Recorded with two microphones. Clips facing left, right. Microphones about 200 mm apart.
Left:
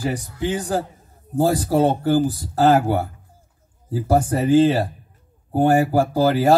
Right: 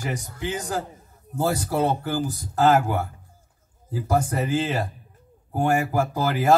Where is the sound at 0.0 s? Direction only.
35° left (ahead or behind).